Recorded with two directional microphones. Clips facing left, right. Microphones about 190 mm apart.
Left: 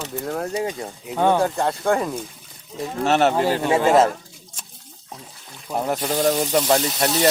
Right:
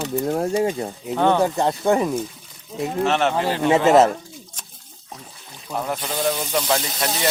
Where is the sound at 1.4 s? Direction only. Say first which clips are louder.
Right 2 dB; 20° right (ahead or behind).